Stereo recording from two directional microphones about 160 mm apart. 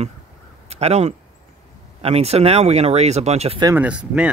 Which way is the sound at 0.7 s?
40° right (ahead or behind).